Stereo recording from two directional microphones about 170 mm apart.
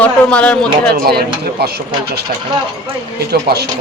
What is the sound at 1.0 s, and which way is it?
A man's voice, 65° right (ahead or behind).